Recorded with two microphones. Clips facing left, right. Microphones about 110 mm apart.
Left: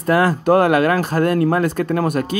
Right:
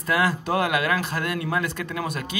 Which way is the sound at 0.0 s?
45° left (ahead or behind).